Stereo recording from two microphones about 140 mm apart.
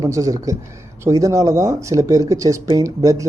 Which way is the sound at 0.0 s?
25° right (ahead or behind).